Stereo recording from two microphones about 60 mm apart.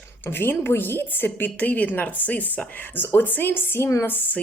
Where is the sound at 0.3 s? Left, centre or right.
Left.